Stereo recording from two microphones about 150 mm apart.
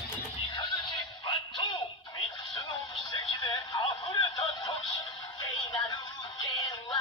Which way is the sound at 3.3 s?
30° left (ahead or behind).